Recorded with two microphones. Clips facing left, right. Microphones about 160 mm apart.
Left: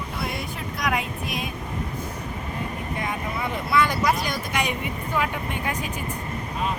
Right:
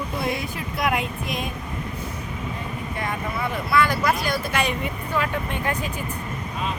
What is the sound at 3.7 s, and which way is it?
Speech, 20° left (ahead or behind).